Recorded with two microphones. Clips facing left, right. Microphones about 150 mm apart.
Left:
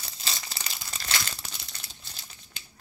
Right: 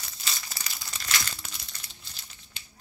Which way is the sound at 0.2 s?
30° left (ahead or behind).